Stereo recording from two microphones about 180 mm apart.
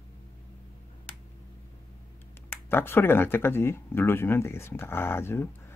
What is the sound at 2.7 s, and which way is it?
Speech, 10° left (ahead or behind).